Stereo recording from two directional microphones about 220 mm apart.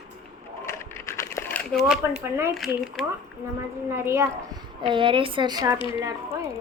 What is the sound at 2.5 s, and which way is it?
Speech, centre (ahead or behind).